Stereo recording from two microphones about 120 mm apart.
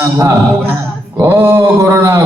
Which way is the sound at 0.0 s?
25° right (ahead or behind).